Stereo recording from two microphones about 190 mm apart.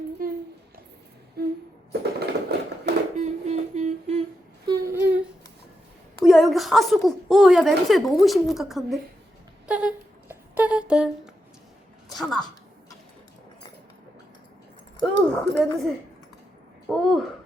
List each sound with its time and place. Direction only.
0.2 s a sound: 50° right (ahead or behind)
1.4 s music: 55° right (ahead or behind)
1.9 s a sound: 60° right (ahead or behind)
3.2 s humming: 35° right (ahead or behind)
4.6 s humming: 15° right (ahead or behind)
6.2 s a woman's voice: centre (ahead or behind)
9.6 s humming: 5° right (ahead or behind)
12.1 s a woman's voice: 5° left (ahead or behind)
15.3 s speech: 10° left (ahead or behind)
16.9 s a woman's voice: 5° left (ahead or behind)